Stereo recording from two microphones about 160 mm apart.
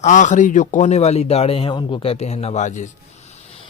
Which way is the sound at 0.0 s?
50° left (ahead or behind).